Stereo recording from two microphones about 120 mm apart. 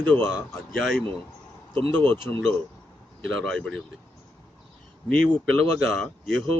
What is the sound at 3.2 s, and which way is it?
Speech, 5° left (ahead or behind).